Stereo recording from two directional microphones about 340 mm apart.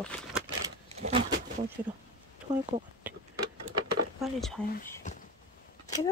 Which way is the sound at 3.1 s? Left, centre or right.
Centre.